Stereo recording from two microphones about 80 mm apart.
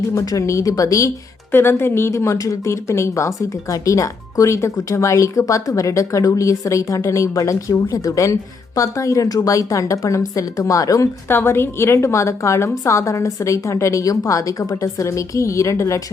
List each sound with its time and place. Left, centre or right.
0.1 s a woman's voice: left
1.5 s a woman's voice: left
11.3 s speech: left